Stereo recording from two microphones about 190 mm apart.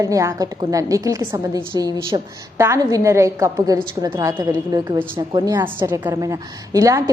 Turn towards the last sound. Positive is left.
turn(degrees=-15)  # may be behind; listen again after turning